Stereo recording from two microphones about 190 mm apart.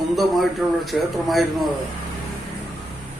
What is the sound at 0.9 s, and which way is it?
Speech, centre (ahead or behind).